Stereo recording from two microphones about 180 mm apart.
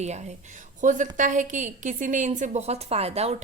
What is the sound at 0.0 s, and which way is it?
A woman's voice, 40° right (ahead or behind).